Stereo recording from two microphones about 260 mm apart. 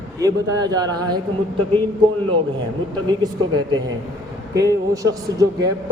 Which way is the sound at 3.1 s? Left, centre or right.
Centre.